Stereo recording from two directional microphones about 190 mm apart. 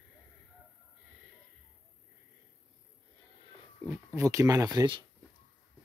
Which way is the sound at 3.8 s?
15° right (ahead or behind).